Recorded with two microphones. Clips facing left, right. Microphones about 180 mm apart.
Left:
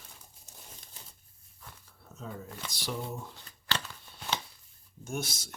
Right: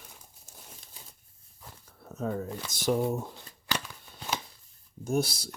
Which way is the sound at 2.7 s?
50° right (ahead or behind).